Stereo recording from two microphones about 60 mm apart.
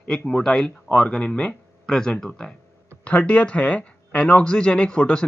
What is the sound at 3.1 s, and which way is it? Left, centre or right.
Speech, left.